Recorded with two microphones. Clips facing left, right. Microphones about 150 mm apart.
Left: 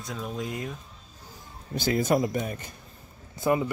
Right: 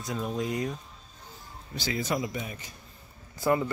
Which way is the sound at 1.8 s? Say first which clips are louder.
Left 6 dB; 50° left (ahead or behind).